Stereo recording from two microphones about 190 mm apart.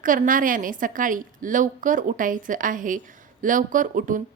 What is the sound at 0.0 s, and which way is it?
A woman's voice, 45° right (ahead or behind).